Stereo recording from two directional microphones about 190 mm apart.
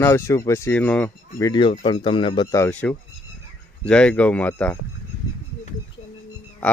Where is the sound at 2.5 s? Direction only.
10° left (ahead or behind).